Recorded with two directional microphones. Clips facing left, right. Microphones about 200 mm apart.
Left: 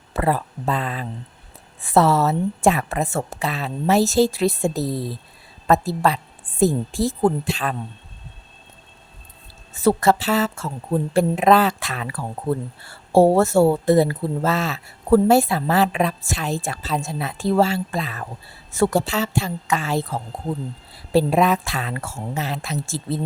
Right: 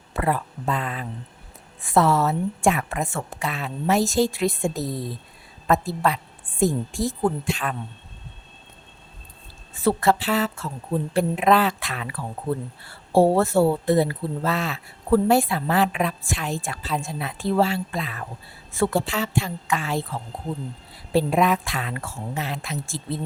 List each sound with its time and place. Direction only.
0.1 s a woman's voice: 35° left (ahead or behind)
9.8 s a woman's voice: 45° left (ahead or behind)
13.1 s a woman's voice: 45° left (ahead or behind)